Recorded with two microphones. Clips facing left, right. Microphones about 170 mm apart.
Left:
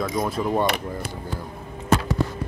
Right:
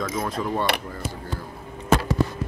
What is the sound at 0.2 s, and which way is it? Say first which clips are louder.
Speech: left 5 dB; 15° left (ahead or behind).